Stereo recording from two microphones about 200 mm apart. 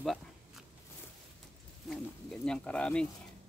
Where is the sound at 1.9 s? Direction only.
5° left (ahead or behind).